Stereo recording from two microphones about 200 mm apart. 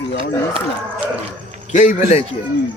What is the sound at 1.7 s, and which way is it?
Speech, 40° left (ahead or behind).